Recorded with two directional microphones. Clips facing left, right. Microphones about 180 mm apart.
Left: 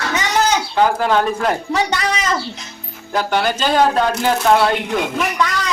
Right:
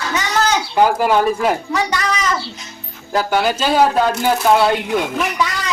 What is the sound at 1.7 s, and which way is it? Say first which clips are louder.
Speech: left 1 dB; 30° left (ahead or behind).